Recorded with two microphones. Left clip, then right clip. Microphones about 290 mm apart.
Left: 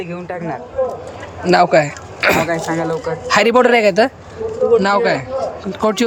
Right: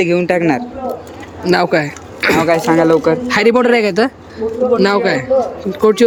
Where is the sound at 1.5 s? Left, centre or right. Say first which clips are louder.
Left 2 dB; centre.